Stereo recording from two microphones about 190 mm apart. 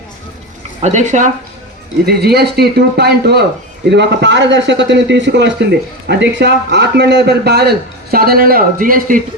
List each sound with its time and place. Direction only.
0.8 s speech: 40° right (ahead or behind)
2.0 s a man's voice: 55° right (ahead or behind)